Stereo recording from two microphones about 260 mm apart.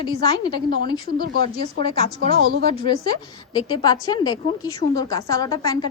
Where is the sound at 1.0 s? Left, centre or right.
Right.